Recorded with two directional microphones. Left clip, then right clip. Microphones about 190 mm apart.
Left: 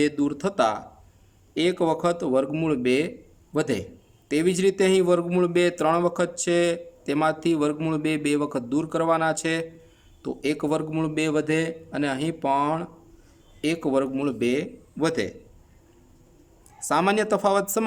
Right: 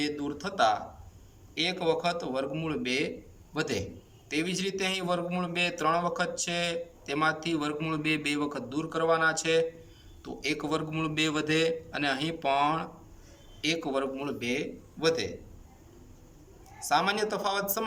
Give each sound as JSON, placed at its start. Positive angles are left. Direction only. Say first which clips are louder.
{"t": 0.0, "sound": "a man's voice", "louder": "left 9 dB", "side_deg": 50}
{"t": 16.8, "sound": "a man's voice", "louder": "left 5 dB", "side_deg": 50}